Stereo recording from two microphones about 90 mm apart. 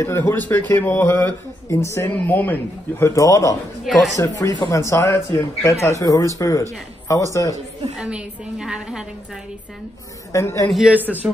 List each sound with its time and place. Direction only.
0.0 s speech: 25° left (ahead or behind)
2.0 s speech: 20° left (ahead or behind); by 3.5 s 40° left (ahead or behind)
3.8 s speech: centre (ahead or behind)
4.2 s speech: 35° left (ahead or behind)
7.9 s a woman's voice: 10° right (ahead or behind)
10.3 s speech: 35° left (ahead or behind)
10.9 s a man's voice: 20° right (ahead or behind)